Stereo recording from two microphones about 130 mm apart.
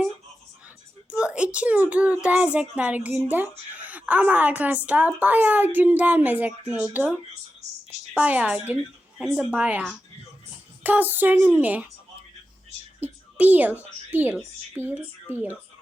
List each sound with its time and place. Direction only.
1.1 s a child's voice: 10° right (ahead or behind)
8.1 s a child's voice: 10° right (ahead or behind)
13.0 s a sound: 15° right (ahead or behind)
14.1 s a child's voice: 15° right (ahead or behind)